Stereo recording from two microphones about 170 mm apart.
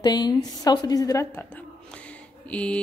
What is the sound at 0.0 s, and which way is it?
A woman's voice, 25° left (ahead or behind).